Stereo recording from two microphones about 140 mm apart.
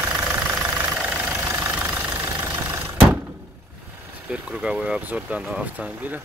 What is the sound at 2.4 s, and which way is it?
Vehicle, 15° right (ahead or behind).